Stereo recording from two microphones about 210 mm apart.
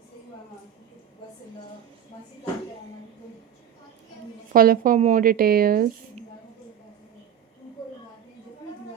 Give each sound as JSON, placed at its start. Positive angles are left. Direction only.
{"t": 4.5, "sound": "a woman's voice", "side_deg": -40}